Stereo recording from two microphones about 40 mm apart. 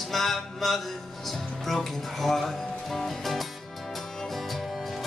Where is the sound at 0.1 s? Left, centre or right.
Centre.